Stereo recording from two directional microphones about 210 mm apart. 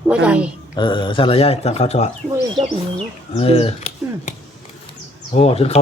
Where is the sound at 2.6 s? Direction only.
25° right (ahead or behind).